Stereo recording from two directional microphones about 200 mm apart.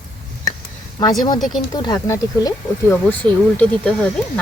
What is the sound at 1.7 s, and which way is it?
Speech, 20° left (ahead or behind).